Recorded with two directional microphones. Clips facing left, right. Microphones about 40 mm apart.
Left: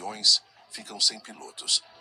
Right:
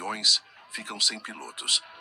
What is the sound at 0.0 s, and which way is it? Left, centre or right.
Speech, right.